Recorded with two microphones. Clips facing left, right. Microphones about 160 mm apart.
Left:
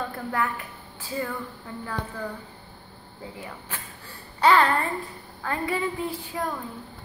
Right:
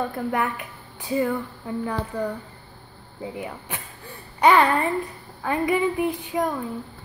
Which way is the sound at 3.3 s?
15° right (ahead or behind).